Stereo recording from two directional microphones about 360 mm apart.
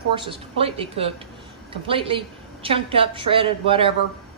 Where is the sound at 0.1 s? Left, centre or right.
Centre.